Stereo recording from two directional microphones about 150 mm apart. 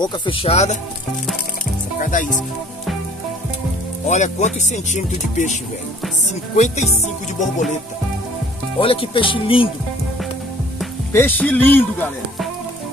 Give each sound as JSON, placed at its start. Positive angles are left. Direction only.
{"t": 0.0, "sound": "speech", "side_deg": 35}
{"t": 2.0, "sound": "speech", "side_deg": 60}
{"t": 4.1, "sound": "speech", "side_deg": 50}
{"t": 8.7, "sound": "speech", "side_deg": 35}
{"t": 11.1, "sound": "speech", "side_deg": 10}